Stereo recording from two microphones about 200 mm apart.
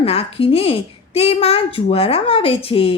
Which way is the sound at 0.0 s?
30° left (ahead or behind).